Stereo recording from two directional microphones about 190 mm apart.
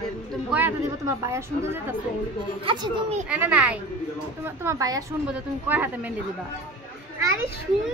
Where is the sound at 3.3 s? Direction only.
5° right (ahead or behind).